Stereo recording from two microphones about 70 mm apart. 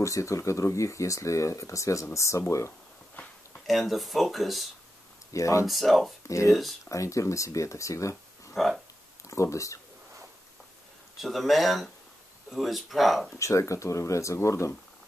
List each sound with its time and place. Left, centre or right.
0.0 s speech: left
3.6 s speech: centre
5.3 s speech: left
5.7 s speech: centre
6.2 s speech: left
8.5 s speech: centre
9.3 s speech: left
11.1 s speech: centre
13.4 s speech: left